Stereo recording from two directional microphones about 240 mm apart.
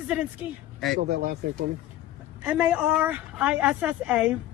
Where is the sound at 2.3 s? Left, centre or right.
Centre.